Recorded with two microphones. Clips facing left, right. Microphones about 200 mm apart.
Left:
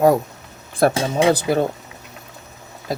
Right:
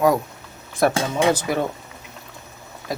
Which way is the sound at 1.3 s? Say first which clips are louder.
Left 4 dB; 35° left (ahead or behind).